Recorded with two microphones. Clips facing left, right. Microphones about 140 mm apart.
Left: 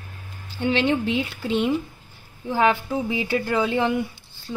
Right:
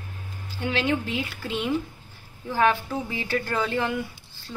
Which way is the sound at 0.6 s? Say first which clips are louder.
Left 4 dB; 25° left (ahead or behind).